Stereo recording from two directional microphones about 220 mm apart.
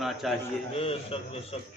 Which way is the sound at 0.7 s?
25° left (ahead or behind).